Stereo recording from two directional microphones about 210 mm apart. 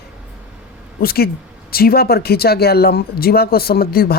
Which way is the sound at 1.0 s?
45° left (ahead or behind).